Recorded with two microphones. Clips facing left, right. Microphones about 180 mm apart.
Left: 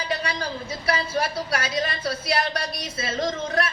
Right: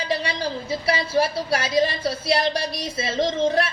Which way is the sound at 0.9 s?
30° right (ahead or behind).